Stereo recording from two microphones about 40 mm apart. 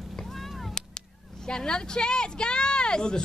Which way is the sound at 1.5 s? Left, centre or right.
Left.